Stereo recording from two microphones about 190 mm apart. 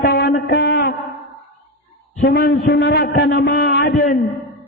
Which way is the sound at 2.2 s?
55° left (ahead or behind).